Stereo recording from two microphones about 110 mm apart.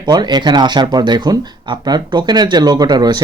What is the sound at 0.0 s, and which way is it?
Speech, 40° right (ahead or behind).